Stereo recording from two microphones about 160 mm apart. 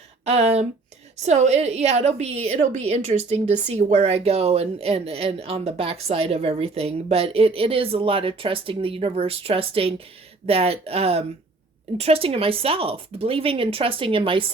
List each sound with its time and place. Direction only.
0.3 s speech: 40° right (ahead or behind)